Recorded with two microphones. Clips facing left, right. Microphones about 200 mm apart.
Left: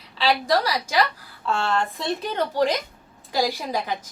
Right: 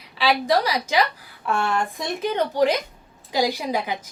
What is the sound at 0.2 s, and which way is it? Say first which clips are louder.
A woman's voice: right 1 dB; 15° right (ahead or behind).